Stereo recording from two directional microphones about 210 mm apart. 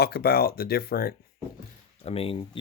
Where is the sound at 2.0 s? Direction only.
25° left (ahead or behind).